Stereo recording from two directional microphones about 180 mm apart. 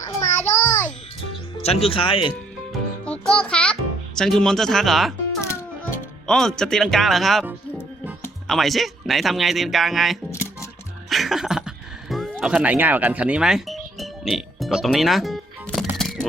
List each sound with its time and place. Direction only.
0.2 s child singing: 10° left (ahead or behind)
1.6 s speech: 35° left (ahead or behind)
3.0 s music: 5° left (ahead or behind)
4.2 s speech: 5° left (ahead or behind)
5.4 s music: 15° left (ahead or behind)
6.2 s speech: 5° left (ahead or behind)
7.4 s music: 10° right (ahead or behind)
8.4 s speech: centre (ahead or behind)
11.1 s music: centre (ahead or behind)